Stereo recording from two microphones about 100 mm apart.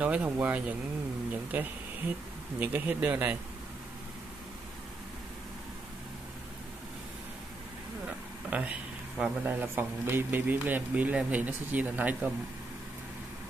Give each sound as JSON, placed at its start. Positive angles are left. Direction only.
{"t": 0.0, "sound": "a man's voice", "side_deg": -15}
{"t": 8.5, "sound": "a man's voice", "side_deg": -15}